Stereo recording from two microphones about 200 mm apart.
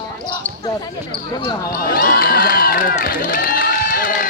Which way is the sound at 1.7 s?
50° left (ahead or behind).